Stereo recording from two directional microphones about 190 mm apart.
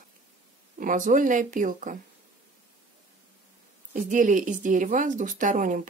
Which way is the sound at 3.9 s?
45° right (ahead or behind).